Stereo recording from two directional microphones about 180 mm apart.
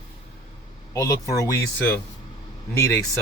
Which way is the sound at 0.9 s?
15° left (ahead or behind).